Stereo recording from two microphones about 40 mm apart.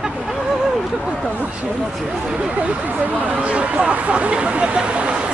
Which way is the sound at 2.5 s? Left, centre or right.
Right.